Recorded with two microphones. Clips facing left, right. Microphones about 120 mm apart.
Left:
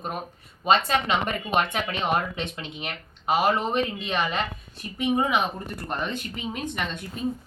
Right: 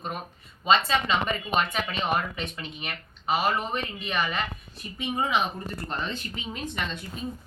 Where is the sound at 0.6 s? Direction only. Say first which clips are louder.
Left 1 dB; 55° left (ahead or behind).